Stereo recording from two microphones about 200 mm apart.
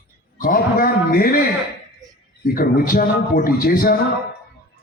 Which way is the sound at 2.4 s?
45° left (ahead or behind).